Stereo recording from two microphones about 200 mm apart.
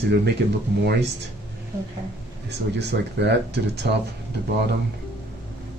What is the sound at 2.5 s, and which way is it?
Speech, 55° right (ahead or behind).